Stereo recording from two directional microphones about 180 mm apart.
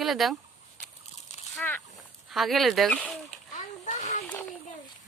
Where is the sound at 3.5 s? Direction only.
40° left (ahead or behind).